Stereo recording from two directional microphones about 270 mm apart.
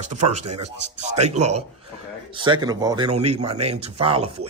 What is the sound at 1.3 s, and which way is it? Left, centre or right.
Speech, right.